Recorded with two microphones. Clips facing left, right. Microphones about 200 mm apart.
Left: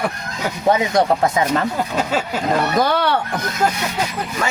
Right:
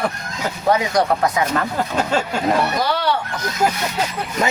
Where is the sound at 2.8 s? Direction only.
50° left (ahead or behind).